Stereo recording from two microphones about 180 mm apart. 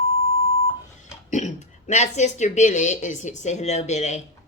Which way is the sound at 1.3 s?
40° left (ahead or behind).